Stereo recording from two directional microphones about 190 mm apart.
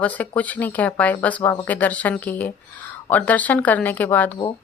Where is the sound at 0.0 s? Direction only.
10° left (ahead or behind).